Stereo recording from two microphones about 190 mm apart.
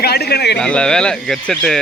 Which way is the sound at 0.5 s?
5° left (ahead or behind).